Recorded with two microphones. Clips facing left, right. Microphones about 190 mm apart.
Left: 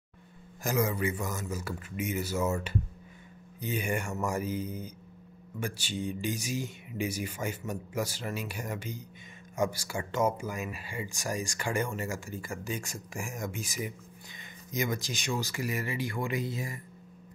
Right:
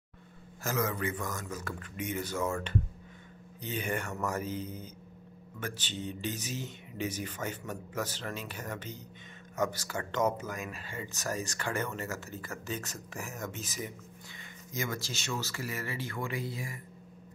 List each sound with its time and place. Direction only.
0.7 s speech: 10° left (ahead or behind)